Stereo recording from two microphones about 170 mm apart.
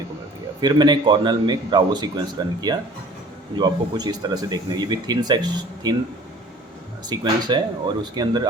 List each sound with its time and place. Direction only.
0.6 s speech: 25° right (ahead or behind)
7.1 s speech: 25° right (ahead or behind)